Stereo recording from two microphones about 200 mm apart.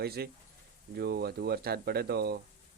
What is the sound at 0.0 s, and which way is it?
Speech, 50° right (ahead or behind).